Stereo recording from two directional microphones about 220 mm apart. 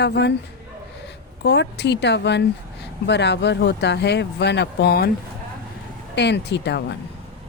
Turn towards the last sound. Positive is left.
turn(degrees=50)  # may be behind; listen again after turning